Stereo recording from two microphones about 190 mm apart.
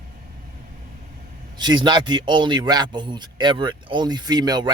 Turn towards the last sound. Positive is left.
turn(degrees=-20)  # may be behind; listen again after turning